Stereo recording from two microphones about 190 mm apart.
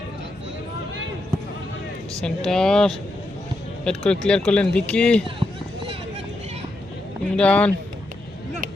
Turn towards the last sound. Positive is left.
turn(degrees=5)  # may be behind; listen again after turning